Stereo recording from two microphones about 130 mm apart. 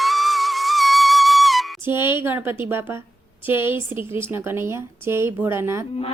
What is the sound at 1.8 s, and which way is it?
A woman's voice, 20° right (ahead or behind).